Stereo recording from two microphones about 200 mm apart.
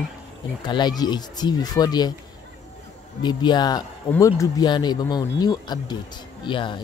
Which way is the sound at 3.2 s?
20° left (ahead or behind).